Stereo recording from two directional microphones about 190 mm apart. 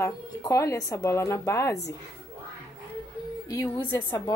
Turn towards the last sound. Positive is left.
turn(degrees=20)  # may be behind; listen again after turning